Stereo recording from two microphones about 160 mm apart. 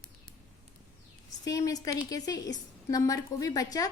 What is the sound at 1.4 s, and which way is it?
A woman's voice, 20° left (ahead or behind).